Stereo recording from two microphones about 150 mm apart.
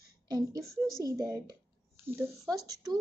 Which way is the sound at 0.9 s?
25° right (ahead or behind).